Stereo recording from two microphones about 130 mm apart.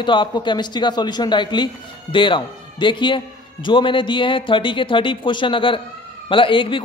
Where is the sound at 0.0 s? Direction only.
40° left (ahead or behind).